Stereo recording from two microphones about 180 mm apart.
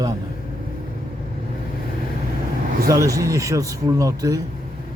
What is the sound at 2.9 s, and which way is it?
Speech, 20° right (ahead or behind).